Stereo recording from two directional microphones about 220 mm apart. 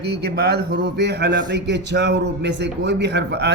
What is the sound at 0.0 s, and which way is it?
A man's voice, 45° right (ahead or behind).